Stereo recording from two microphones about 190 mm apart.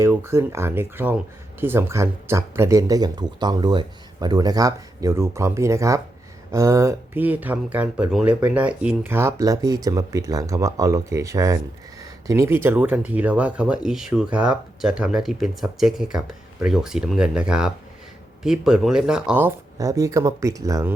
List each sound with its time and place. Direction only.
0.0 s speech: 15° right (ahead or behind)